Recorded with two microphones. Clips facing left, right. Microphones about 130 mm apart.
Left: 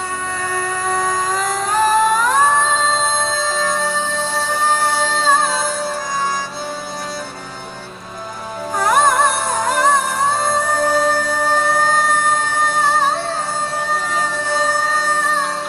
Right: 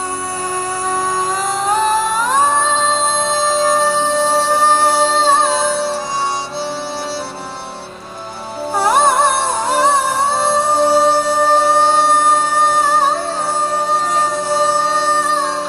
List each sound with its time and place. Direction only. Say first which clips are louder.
3.3 s music: right 5 dB; 35° right (ahead or behind)
8.7 s music: right 2 dB; 30° right (ahead or behind)